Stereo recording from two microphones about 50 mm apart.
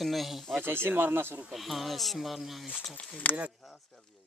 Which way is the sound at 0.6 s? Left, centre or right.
Right.